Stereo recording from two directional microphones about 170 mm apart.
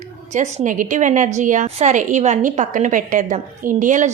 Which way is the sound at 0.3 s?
50° right (ahead or behind).